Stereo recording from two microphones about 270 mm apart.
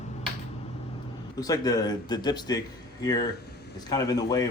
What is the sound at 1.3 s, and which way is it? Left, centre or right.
Speech, centre.